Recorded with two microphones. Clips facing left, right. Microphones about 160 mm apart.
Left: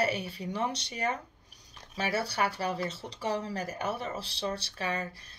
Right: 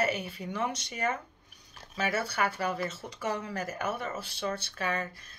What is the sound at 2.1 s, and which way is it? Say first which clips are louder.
Speech: left 1 dB; 35° left (ahead or behind).